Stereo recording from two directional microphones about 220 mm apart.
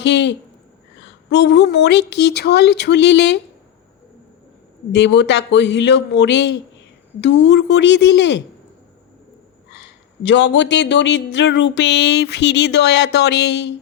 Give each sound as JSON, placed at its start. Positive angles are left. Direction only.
{"t": 0.0, "sound": "speech", "side_deg": 55}
{"t": 4.9, "sound": "speech", "side_deg": 50}
{"t": 9.7, "sound": "speech", "side_deg": 55}